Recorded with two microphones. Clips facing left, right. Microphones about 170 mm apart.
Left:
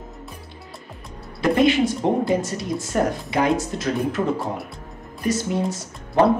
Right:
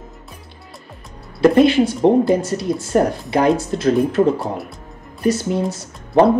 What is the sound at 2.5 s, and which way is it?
Speech, 35° right (ahead or behind).